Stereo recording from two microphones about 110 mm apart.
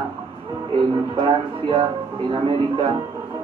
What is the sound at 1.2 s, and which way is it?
Speech, 55° right (ahead or behind).